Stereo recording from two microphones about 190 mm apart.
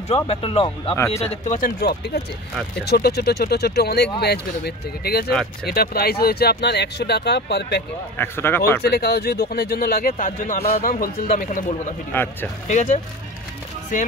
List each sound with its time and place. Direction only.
0.1 s speech: 30° left (ahead or behind)
1.8 s speech: 55° left (ahead or behind)
8.2 s speech: 10° left (ahead or behind)
8.8 s speech: 60° left (ahead or behind); by 10.8 s 35° left (ahead or behind)
10.8 s speech: 45° left (ahead or behind)
12.1 s speech: 10° left (ahead or behind)
12.6 s speech: 40° left (ahead or behind)